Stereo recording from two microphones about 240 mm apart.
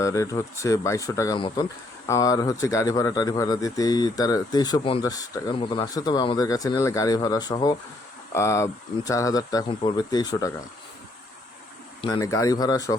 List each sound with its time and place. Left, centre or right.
0.0 s speech: centre
12.0 s speech: centre